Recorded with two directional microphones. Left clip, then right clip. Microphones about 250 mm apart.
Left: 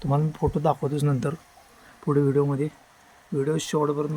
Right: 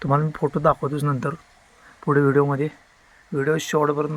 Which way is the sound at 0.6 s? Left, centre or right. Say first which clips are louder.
Right 6 dB; centre.